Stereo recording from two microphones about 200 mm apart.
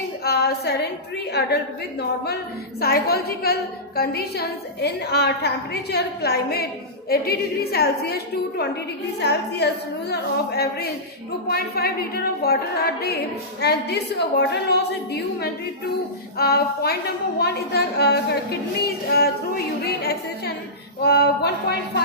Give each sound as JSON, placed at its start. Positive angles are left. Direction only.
{"t": 0.3, "sound": "a sound", "side_deg": 50}
{"t": 1.3, "sound": "a woman's voice", "side_deg": 55}
{"t": 20.0, "sound": "music", "side_deg": 50}
{"t": 21.0, "sound": "a woman's voice", "side_deg": 55}